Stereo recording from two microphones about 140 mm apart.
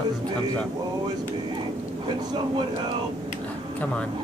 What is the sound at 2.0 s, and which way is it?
Speech, 30° right (ahead or behind).